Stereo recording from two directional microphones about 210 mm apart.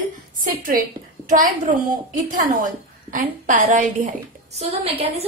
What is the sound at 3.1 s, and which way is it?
A woman's voice, 35° right (ahead or behind).